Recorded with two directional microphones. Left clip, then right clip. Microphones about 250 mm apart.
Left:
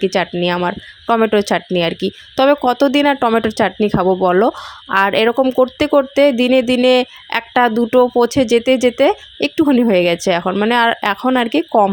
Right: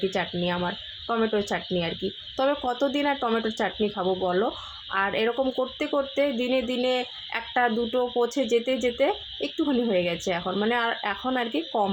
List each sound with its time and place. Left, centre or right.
0.1 s speech: left